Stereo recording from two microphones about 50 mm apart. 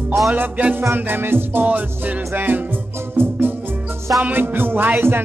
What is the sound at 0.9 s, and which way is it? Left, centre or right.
Music, right.